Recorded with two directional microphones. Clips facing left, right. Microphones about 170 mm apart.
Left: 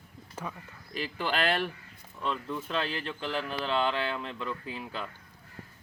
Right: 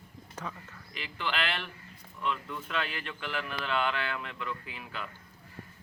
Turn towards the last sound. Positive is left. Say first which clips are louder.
# left 4 dB
turn(degrees=30)  # may be behind; listen again after turning